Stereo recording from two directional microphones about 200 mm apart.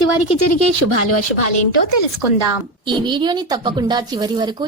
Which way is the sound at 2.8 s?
25° right (ahead or behind).